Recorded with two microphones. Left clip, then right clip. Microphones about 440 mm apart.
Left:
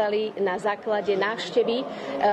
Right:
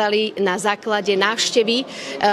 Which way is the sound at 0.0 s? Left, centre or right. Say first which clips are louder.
Right 5 dB; right.